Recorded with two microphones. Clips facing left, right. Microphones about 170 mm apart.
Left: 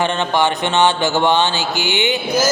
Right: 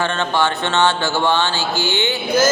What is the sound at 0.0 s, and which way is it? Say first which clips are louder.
Mantra: left 2 dB; 15° left (ahead or behind).